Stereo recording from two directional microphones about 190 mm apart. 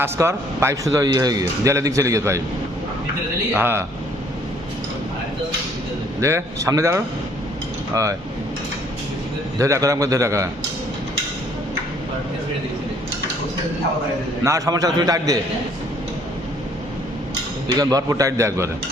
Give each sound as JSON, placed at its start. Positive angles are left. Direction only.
{"t": 0.0, "sound": "speech", "side_deg": -15}
{"t": 3.5, "sound": "speech", "side_deg": -10}
{"t": 6.1, "sound": "speech", "side_deg": -15}
{"t": 9.6, "sound": "speech", "side_deg": -15}
{"t": 14.4, "sound": "a man's voice", "side_deg": -15}
{"t": 17.7, "sound": "speech", "side_deg": -20}